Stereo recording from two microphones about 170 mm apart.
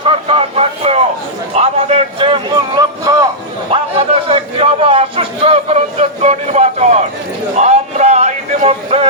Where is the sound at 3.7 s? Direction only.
35° right (ahead or behind).